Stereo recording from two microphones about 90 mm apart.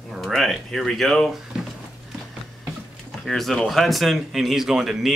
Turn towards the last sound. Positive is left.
turn(degrees=-5)  # may be behind; listen again after turning